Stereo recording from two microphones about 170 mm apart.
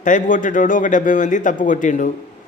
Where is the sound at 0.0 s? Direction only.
50° left (ahead or behind).